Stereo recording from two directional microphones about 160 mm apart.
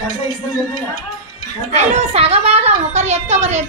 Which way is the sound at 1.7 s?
45° right (ahead or behind).